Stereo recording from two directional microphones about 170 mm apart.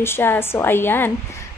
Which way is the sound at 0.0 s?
15° left (ahead or behind).